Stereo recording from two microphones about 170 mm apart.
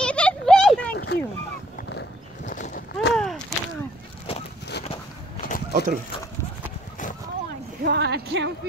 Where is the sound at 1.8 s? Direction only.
80° left.